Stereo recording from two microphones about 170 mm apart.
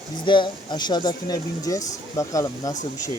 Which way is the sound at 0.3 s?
30° left (ahead or behind).